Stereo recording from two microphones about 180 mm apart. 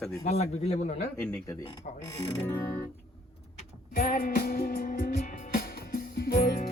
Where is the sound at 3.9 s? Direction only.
55° left (ahead or behind).